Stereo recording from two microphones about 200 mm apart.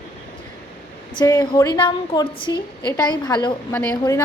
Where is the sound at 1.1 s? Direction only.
20° left (ahead or behind).